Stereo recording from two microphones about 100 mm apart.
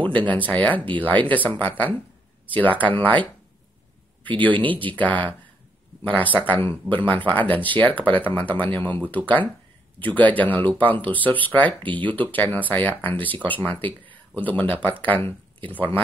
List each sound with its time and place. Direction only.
0.0 s speech: 15° left (ahead or behind)
4.6 s speech: 15° left (ahead or behind)
11.8 s speech: 55° right (ahead or behind)
12.1 s speech: 15° left (ahead or behind)